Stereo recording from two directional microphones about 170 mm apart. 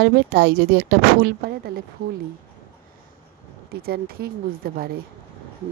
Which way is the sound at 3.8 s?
65° right (ahead or behind).